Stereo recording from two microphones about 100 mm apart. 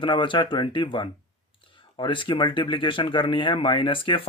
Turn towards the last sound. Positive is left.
turn(degrees=55)  # may be behind; listen again after turning